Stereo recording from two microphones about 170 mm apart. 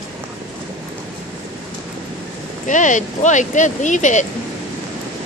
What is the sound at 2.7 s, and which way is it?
Speech, 45° left (ahead or behind).